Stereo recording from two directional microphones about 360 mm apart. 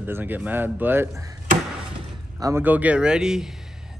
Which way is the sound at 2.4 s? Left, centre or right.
Centre.